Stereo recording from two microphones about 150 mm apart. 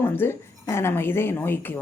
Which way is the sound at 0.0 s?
15° left (ahead or behind).